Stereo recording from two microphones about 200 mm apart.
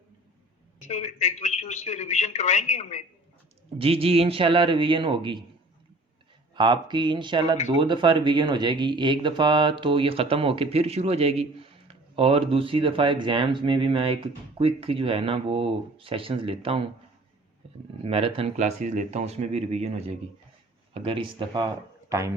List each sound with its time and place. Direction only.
0.9 s a man's voice: 35° left (ahead or behind)
3.8 s speech: 30° right (ahead or behind)
6.5 s speech: 20° right (ahead or behind)
18.0 s speech: 30° right (ahead or behind)